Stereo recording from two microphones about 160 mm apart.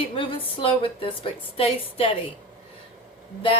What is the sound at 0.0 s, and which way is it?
A woman's voice, 35° left (ahead or behind).